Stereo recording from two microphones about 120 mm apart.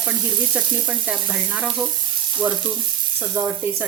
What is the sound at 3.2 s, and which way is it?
Speech, 15° right (ahead or behind).